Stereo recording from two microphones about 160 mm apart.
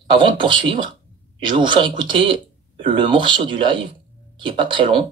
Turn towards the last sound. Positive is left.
turn(degrees=-30)  # may be behind; listen again after turning